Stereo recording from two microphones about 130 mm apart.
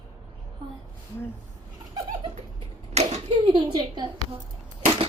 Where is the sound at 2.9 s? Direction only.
60° right (ahead or behind).